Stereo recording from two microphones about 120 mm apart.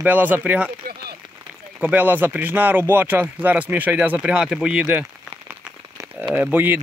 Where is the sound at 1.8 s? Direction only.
15° right (ahead or behind).